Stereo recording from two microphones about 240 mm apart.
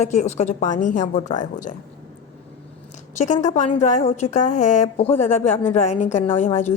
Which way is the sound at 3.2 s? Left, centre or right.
Left.